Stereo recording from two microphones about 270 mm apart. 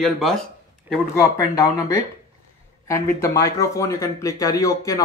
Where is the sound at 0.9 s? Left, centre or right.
Centre.